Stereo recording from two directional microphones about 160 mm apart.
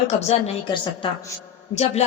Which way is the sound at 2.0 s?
40° left (ahead or behind).